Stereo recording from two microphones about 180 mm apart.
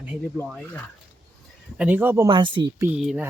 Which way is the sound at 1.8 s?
10° right (ahead or behind).